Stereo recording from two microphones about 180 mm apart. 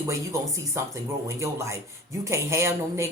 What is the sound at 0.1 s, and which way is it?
Speech, 15° right (ahead or behind).